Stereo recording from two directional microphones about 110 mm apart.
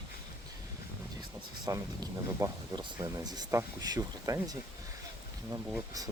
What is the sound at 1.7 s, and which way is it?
Speech, 35° right (ahead or behind).